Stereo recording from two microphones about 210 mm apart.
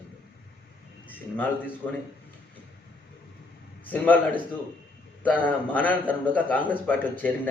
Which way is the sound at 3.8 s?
10° left (ahead or behind).